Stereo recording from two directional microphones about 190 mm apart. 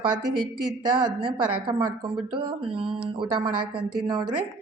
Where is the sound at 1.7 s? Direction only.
25° right (ahead or behind).